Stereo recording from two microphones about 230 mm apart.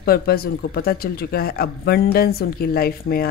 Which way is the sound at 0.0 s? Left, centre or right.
Left.